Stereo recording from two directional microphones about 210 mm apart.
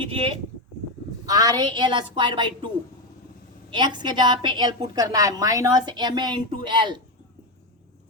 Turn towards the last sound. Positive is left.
turn(degrees=-20)  # may be behind; listen again after turning